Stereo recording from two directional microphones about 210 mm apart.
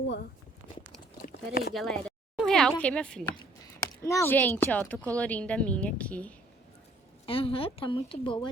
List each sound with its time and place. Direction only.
1.2 s a sound: 45° left (ahead or behind)
1.7 s a woman's voice: centre (ahead or behind)
7.3 s speech: 25° left (ahead or behind)